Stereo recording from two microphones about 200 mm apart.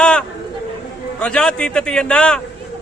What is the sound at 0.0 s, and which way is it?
Chatter, 5° left (ahead or behind).